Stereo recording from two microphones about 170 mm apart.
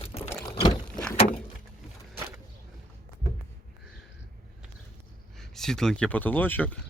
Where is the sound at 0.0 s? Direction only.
35° left (ahead or behind).